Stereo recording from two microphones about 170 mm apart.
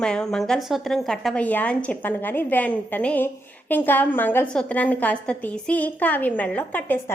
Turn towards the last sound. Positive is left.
turn(degrees=10)  # may be behind; listen again after turning